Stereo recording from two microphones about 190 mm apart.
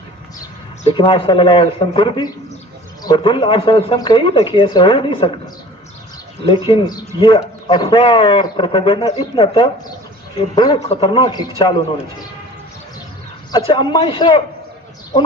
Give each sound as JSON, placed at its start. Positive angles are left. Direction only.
{"t": 0.9, "sound": "speech", "side_deg": 25}
{"t": 6.4, "sound": "speech", "side_deg": 30}
{"t": 13.7, "sound": "speech", "side_deg": 25}